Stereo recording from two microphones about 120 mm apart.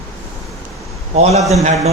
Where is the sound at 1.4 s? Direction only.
Centre (ahead or behind).